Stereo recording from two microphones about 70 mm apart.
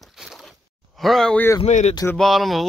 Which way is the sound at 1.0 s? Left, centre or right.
Centre.